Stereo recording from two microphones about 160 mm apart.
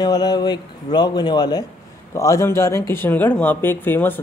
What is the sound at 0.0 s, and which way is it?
Speech, 25° left (ahead or behind).